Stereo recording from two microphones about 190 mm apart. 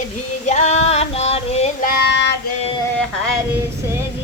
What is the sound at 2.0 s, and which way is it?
Child singing, 65° left (ahead or behind).